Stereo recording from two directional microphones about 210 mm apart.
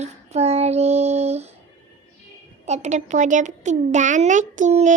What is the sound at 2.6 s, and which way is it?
A child's voice, 35° right (ahead or behind).